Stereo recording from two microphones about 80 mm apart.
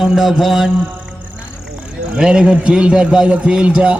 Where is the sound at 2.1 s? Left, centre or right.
Centre.